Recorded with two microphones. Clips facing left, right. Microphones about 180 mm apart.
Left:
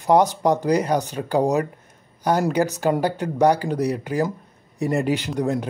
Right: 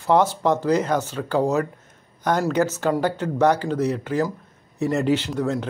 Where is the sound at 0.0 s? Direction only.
15° left (ahead or behind).